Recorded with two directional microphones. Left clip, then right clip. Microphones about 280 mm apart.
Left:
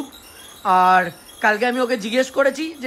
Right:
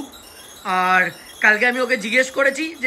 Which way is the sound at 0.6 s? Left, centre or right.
Centre.